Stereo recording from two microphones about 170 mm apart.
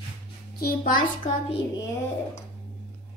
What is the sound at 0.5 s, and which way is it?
Speech, 60° left (ahead or behind).